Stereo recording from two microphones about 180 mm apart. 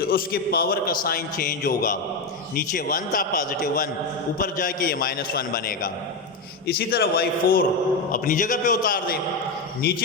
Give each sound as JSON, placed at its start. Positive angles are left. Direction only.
{"t": 0.0, "sound": "a man's voice", "side_deg": 55}